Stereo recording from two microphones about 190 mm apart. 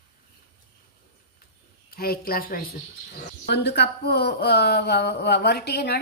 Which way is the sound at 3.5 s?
60° left (ahead or behind).